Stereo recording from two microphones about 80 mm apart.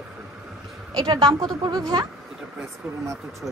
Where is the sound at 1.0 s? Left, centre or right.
Right.